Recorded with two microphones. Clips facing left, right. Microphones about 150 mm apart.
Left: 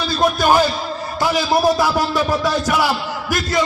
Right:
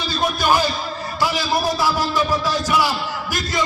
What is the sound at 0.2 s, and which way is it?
Speech, 45° left (ahead or behind).